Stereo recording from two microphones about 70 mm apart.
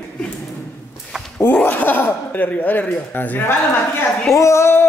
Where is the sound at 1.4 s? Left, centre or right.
Left.